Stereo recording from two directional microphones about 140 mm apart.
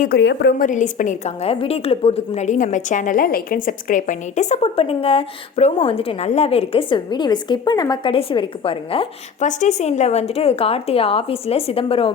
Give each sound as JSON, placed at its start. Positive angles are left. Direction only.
{"t": 0.6, "sound": "a woman's voice", "side_deg": 65}
{"t": 9.4, "sound": "a woman's voice", "side_deg": 60}